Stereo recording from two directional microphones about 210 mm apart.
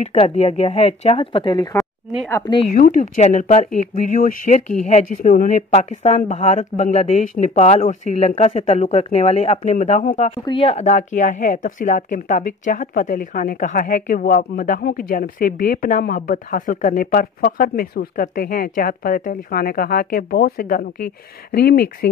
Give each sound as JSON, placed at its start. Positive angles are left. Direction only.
{"t": 0.0, "sound": "speech", "side_deg": 30}
{"t": 2.7, "sound": "speech", "side_deg": 35}